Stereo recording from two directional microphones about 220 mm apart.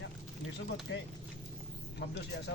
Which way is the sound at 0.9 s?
55° left (ahead or behind).